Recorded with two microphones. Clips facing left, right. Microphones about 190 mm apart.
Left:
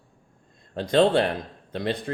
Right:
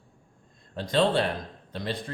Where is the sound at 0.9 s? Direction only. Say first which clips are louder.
Left 4 dB; 50° left (ahead or behind).